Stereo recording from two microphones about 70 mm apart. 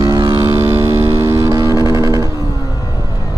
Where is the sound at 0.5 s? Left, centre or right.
Right.